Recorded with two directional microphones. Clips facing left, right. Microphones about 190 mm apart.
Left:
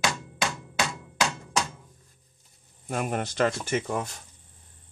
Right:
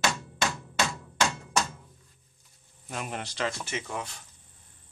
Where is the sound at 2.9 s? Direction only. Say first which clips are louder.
Left 7 dB; 50° left (ahead or behind).